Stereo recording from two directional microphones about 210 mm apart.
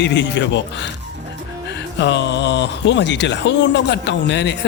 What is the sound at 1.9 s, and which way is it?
A man's voice, 55° left (ahead or behind).